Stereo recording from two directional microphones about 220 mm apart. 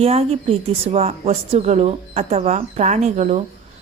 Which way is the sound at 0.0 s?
25° right (ahead or behind).